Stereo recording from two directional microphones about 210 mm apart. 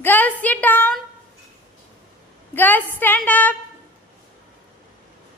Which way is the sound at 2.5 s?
10° left (ahead or behind).